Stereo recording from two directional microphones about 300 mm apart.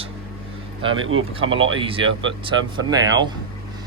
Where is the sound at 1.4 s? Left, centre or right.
Centre.